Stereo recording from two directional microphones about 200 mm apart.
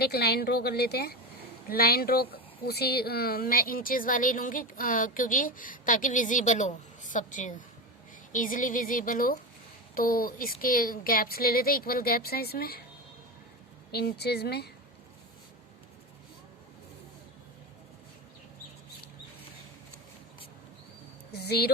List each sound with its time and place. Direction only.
0.0 s speech: 55° left (ahead or behind)
13.9 s speech: 55° left (ahead or behind)
21.3 s speech: 55° left (ahead or behind)